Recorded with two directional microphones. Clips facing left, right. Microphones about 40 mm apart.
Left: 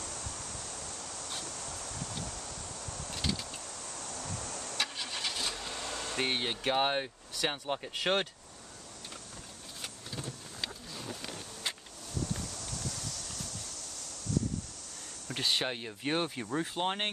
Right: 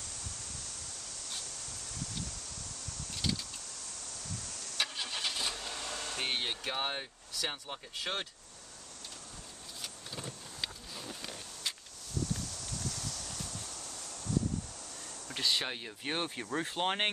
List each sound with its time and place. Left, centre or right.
3.1 s vehicle: left
4.0 s waves: left
4.7 s vehicle: centre
6.3 s speech: centre
6.6 s speech: left
10.1 s vehicle: centre
12.4 s clip-clop: centre
15.2 s a sound: centre
15.7 s speech: centre
16.5 s speech: centre